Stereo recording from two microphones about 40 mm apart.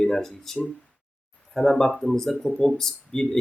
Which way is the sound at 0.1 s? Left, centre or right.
Centre.